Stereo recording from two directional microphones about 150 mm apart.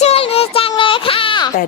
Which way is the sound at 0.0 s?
40° left (ahead or behind).